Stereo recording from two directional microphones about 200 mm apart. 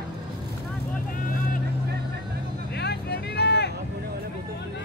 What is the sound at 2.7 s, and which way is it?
Vehicle, 55° left (ahead or behind).